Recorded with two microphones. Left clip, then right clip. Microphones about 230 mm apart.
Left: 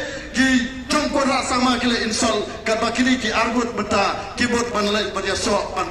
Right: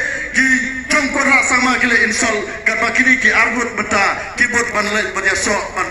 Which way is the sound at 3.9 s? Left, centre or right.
Left.